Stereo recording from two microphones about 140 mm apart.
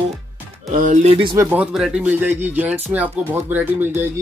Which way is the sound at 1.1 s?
40° right (ahead or behind).